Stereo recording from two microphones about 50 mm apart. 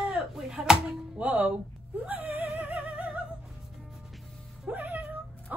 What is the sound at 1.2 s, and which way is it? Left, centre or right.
Music, right.